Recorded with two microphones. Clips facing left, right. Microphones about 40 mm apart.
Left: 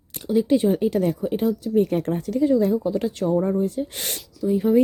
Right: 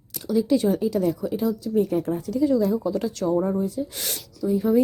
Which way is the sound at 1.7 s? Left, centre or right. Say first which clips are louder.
Left 1 dB; left.